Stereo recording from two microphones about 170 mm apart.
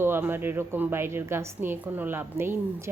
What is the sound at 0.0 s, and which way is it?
A woman's voice, 15° right (ahead or behind).